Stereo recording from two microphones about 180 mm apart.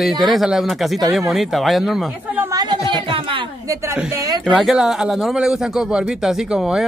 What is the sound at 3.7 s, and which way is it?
Speech, 15° right (ahead or behind).